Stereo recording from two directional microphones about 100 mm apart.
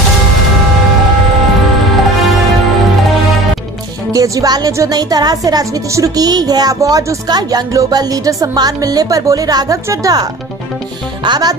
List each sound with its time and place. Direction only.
4.1 s speech: 35° right (ahead or behind)